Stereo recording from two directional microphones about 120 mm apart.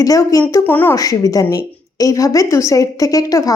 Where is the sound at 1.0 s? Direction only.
30° left (ahead or behind).